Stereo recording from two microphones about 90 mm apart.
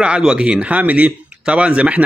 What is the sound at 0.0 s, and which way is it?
Speech, 10° right (ahead or behind).